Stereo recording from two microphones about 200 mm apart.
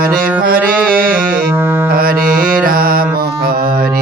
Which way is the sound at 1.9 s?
45° right (ahead or behind).